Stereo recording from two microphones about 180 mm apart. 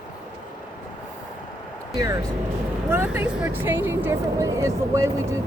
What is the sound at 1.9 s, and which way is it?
Speech, 15° right (ahead or behind).